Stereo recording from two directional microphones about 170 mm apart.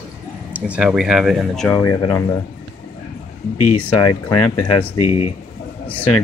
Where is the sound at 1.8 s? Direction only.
25° left (ahead or behind).